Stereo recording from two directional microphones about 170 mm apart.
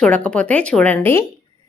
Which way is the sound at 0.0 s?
5° left (ahead or behind).